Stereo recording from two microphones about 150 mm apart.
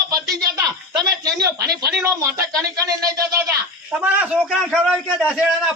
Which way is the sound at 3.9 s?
10° right (ahead or behind).